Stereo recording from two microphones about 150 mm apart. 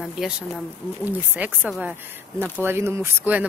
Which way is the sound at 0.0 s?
5° right (ahead or behind).